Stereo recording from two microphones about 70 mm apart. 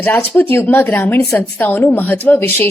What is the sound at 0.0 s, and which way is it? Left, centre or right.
A woman's voice, left.